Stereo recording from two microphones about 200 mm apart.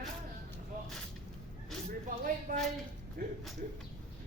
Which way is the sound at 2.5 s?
45° right (ahead or behind).